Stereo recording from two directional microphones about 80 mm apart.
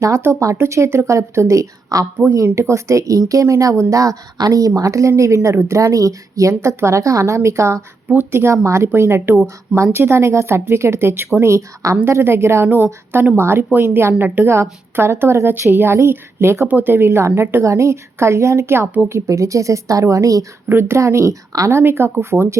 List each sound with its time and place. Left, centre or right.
0.0 s speech: right
14.5 s speech: right
20.7 s speech: right